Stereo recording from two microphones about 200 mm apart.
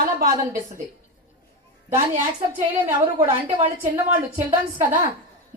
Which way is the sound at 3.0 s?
25° right (ahead or behind).